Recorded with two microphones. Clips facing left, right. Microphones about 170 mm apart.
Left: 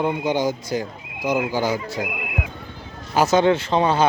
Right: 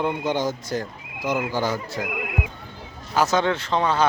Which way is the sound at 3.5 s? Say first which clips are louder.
Left 4 dB; 20° left (ahead or behind).